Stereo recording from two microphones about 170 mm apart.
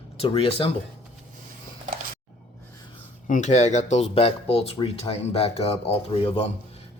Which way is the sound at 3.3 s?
45° left (ahead or behind).